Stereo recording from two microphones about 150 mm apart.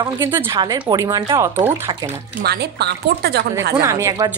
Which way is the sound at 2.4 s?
90° right.